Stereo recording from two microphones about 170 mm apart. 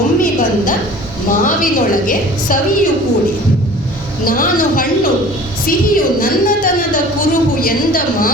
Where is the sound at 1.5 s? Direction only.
55° left (ahead or behind).